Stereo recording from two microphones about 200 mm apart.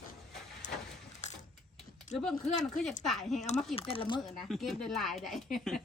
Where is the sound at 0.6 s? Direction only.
40° left (ahead or behind).